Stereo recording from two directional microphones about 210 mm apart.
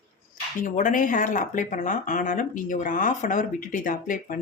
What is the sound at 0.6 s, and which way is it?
Speech, 40° left (ahead or behind).